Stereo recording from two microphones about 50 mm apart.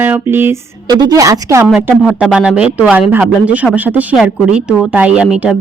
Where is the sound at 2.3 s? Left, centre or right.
Right.